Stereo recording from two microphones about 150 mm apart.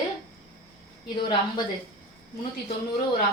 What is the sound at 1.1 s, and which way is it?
Speech, 30° left (ahead or behind).